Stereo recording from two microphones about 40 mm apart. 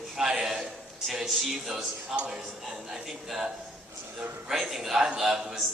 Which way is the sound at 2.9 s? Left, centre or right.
Centre.